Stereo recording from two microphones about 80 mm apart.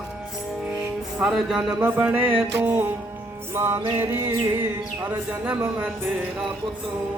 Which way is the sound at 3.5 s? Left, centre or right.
Right.